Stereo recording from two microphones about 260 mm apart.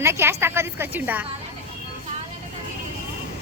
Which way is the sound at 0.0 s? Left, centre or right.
Centre.